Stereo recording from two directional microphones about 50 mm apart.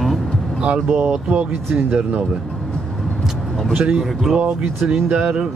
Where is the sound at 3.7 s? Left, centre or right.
Centre.